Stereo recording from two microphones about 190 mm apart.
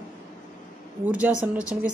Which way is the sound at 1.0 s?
5° right (ahead or behind).